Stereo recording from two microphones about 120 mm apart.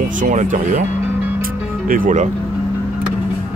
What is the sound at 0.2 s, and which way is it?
Speech, 90° right.